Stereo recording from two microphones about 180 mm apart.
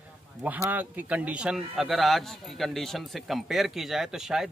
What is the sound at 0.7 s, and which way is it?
A man's voice, 10° right (ahead or behind).